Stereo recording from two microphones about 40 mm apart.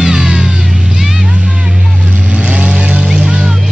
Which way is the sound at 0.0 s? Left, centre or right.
Centre.